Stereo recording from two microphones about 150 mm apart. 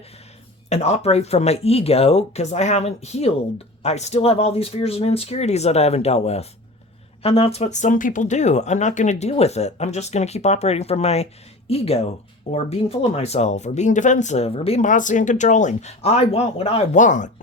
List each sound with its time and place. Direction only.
0.7 s speech: 45° left (ahead or behind)
14.8 s speech: 55° left (ahead or behind)